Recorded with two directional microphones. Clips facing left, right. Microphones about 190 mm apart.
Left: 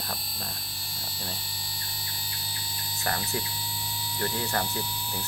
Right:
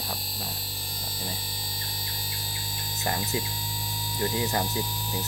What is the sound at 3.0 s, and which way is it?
Speech, 20° right (ahead or behind).